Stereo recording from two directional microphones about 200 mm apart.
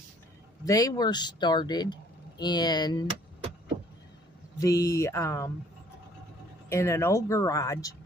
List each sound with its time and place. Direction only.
0.7 s speech: 15° left (ahead or behind)
4.6 s speech: 15° left (ahead or behind)
6.7 s speech: 15° left (ahead or behind)